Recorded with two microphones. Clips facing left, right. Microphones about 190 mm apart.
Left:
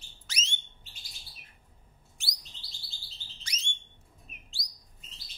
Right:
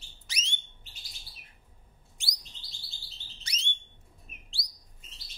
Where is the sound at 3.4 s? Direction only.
30° right (ahead or behind).